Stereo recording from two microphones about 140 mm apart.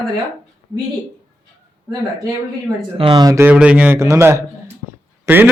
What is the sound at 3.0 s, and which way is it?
Speech, 35° right (ahead or behind).